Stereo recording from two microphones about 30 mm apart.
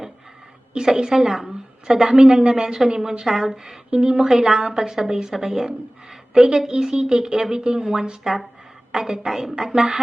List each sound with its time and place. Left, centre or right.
0.9 s a woman's voice: right
3.2 s a woman's voice: centre
3.9 s a woman's voice: right
4.3 s a woman's voice: centre
6.3 s a woman's voice: centre